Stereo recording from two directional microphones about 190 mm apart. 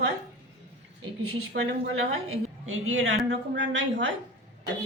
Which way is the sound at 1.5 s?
70° right (ahead or behind).